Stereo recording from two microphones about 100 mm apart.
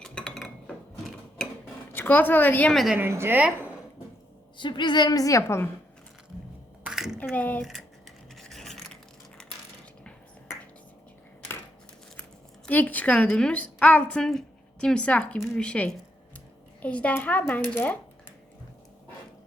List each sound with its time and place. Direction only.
0.0 s cutlery: 10° left (ahead or behind)
1.9 s a woman's voice: 20° left (ahead or behind)
2.7 s speech: 5° right (ahead or behind)
3.0 s a woman's voice: 25° right (ahead or behind)
4.5 s a woman's voice: 50° left (ahead or behind); by 5.6 s 25° left (ahead or behind)
6.8 s typing: 5° right (ahead or behind)
7.3 s a woman's voice: 15° left (ahead or behind)
7.6 s rub: centre (ahead or behind)
12.6 s a woman's voice: 15° left (ahead or behind)